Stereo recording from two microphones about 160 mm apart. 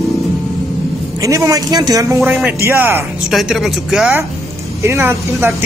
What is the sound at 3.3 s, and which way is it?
Speech, centre (ahead or behind).